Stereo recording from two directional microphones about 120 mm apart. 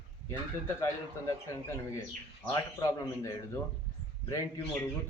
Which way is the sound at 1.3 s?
25° left (ahead or behind).